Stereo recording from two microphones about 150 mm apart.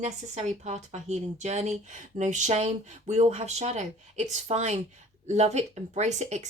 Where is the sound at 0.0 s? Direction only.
45° right (ahead or behind).